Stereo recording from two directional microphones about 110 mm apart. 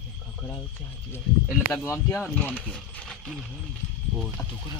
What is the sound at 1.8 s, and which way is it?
Speech, 25° left (ahead or behind).